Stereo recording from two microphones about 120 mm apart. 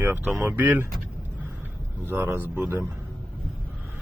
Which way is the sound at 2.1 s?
20° right (ahead or behind).